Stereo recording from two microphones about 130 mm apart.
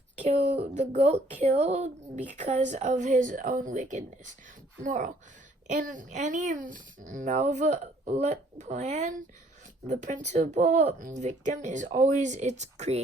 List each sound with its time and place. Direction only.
0.2 s speech: 60° right (ahead or behind)